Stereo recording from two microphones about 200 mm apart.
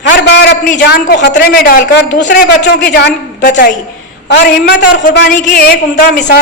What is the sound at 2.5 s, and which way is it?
Speech, 60° left (ahead or behind).